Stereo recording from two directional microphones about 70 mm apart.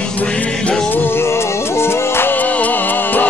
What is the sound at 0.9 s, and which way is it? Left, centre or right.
Music, left.